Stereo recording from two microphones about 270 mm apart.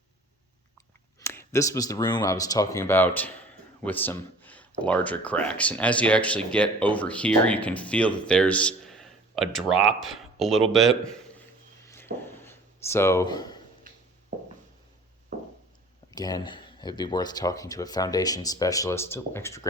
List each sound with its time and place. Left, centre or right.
1.2 s a man's voice: centre
11.9 s a sound: centre
16.1 s speech: centre